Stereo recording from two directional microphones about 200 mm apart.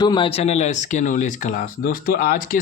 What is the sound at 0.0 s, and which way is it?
Speech, 20° left (ahead or behind).